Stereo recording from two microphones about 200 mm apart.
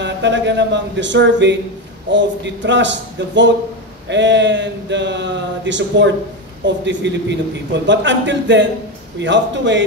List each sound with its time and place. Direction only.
0.0 s a man's voice: 60° right (ahead or behind)